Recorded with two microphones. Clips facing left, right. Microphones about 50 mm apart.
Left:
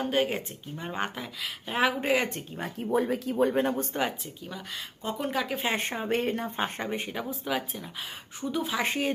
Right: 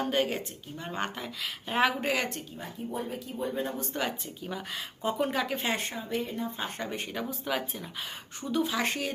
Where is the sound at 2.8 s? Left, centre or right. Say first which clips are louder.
Left 9 dB; left.